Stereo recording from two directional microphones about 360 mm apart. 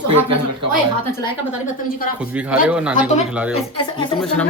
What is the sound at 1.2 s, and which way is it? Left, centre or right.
Speech, centre.